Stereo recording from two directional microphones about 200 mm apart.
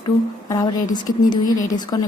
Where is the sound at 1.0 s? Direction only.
20° left (ahead or behind).